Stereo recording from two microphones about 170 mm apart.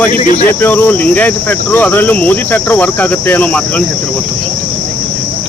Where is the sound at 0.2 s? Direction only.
40° left (ahead or behind).